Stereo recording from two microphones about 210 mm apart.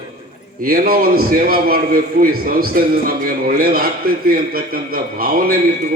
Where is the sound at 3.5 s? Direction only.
45° right (ahead or behind).